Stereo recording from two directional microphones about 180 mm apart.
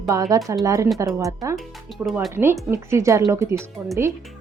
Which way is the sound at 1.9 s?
Centre (ahead or behind).